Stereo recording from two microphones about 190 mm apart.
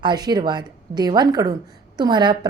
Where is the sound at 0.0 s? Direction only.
20° right (ahead or behind).